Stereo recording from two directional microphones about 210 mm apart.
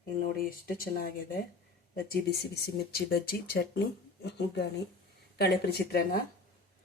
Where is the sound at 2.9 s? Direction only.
45° left (ahead or behind).